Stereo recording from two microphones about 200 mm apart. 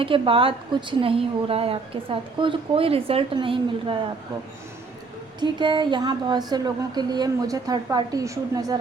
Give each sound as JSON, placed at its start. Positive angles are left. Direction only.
{"t": 0.0, "sound": "a woman's voice", "side_deg": -25}
{"t": 5.4, "sound": "a woman's voice", "side_deg": -20}